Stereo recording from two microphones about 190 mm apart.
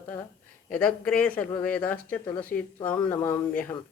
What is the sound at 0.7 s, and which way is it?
Speech, 5° left (ahead or behind).